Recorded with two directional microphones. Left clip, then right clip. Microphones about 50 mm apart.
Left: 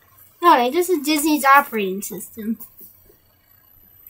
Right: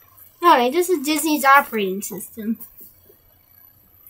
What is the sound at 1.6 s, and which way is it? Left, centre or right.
Speech, centre.